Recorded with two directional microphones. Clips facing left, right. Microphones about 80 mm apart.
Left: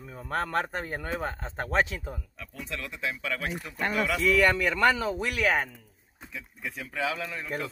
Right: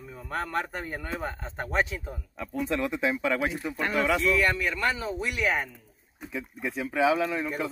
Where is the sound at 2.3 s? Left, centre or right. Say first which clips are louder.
Right 9 dB; right.